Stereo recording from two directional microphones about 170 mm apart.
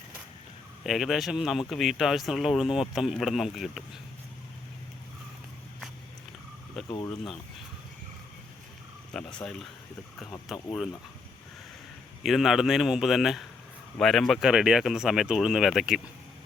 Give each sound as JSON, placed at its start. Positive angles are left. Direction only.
{"t": 0.9, "sound": "speech", "side_deg": 0}
{"t": 6.8, "sound": "speech", "side_deg": 20}
{"t": 9.1, "sound": "speech", "side_deg": 5}
{"t": 12.2, "sound": "speech", "side_deg": 0}